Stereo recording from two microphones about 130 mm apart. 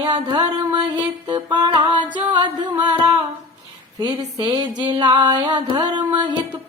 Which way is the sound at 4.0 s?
35° right (ahead or behind).